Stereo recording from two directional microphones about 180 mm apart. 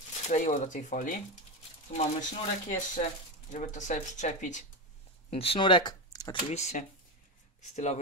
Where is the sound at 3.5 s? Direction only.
45° left (ahead or behind).